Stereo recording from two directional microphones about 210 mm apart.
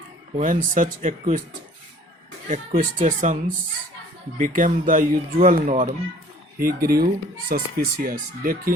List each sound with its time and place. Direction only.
0.3 s speech: 40° right (ahead or behind)
2.5 s speech: 40° right (ahead or behind)